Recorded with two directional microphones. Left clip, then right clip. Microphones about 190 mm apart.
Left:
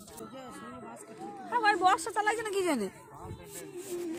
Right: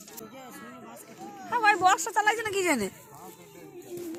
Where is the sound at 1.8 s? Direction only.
15° right (ahead or behind).